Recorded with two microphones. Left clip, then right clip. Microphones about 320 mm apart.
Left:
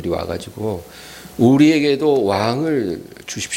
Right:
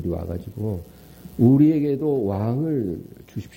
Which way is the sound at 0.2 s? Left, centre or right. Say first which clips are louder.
Left 9 dB; centre.